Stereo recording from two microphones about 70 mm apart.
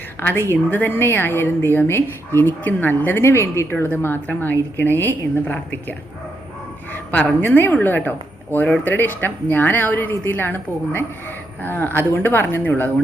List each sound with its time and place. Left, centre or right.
0.2 s a woman's voice: left
6.9 s a sound: left
7.4 s speech: left